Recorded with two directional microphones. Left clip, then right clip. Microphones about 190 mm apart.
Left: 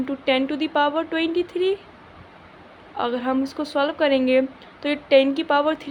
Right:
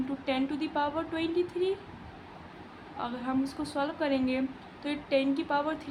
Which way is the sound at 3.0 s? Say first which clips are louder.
Left 10 dB; 30° left (ahead or behind).